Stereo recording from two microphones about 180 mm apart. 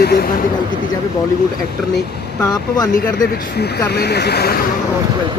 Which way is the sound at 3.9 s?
65° left (ahead or behind).